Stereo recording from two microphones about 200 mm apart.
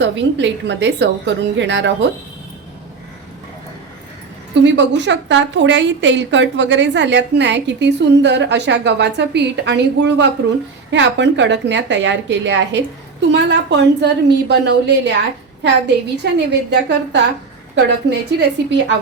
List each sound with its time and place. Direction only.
0.0 s a woman's voice: 65° right (ahead or behind)
4.6 s a woman's voice: 60° right (ahead or behind)
16.2 s a woman's voice: 60° right (ahead or behind)